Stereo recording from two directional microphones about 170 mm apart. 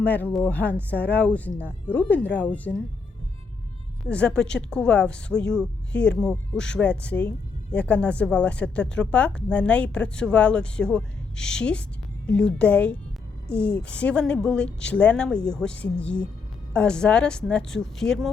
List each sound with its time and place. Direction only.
0.0 s a woman's voice: 10° left (ahead or behind)
4.0 s a woman's voice: 5° left (ahead or behind)